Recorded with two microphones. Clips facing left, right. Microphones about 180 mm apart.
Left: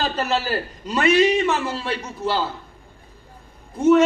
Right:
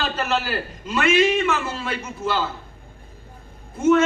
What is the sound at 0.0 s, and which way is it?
A man's voice, 40° left (ahead or behind).